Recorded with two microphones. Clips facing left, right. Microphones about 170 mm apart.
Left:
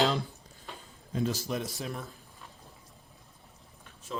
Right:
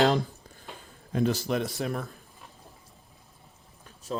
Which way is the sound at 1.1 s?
65° right (ahead or behind).